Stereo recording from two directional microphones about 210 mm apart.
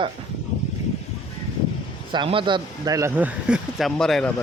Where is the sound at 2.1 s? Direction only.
25° right (ahead or behind); by 4.3 s centre (ahead or behind).